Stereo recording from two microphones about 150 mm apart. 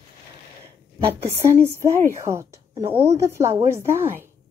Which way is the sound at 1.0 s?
15° right (ahead or behind).